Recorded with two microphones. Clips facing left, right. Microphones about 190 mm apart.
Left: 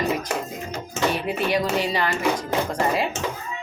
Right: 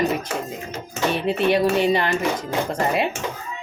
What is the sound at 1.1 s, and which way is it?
A woman's voice, 25° right (ahead or behind).